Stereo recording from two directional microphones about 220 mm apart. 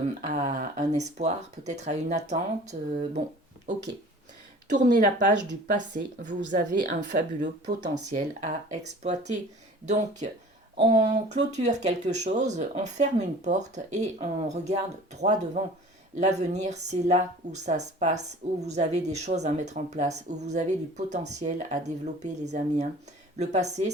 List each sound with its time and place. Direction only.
0.2 s a woman's voice: 35° right (ahead or behind)
4.9 s a woman's voice: 35° right (ahead or behind)
8.1 s a woman's voice: 30° right (ahead or behind)